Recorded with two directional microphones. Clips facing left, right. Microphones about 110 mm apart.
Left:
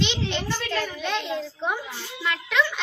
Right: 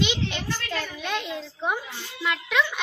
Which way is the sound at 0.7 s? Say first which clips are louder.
Left 3 dB; 5° right (ahead or behind).